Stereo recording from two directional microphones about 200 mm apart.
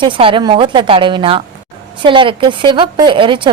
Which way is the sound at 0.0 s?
25° right (ahead or behind).